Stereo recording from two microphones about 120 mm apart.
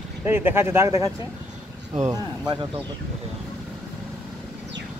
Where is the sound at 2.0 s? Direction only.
35° right (ahead or behind).